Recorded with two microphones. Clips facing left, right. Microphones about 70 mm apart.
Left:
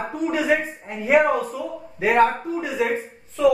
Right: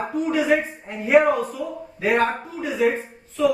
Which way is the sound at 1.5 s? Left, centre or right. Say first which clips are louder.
Even; left.